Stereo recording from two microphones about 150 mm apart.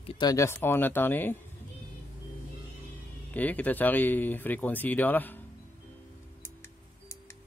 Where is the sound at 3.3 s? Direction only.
10° left (ahead or behind).